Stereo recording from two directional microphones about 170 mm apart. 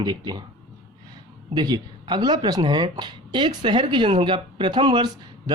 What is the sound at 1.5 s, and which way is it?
Speech, 25° right (ahead or behind).